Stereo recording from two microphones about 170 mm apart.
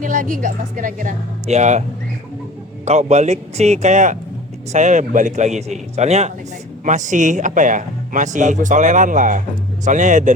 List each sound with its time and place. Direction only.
0.0 s speech: 50° right (ahead or behind)
2.8 s speech: 40° right (ahead or behind)